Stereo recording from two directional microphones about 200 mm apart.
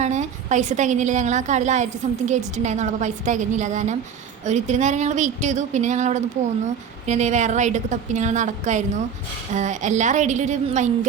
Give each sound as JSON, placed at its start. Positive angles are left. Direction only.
{"t": 0.0, "sound": "a woman's voice", "side_deg": -35}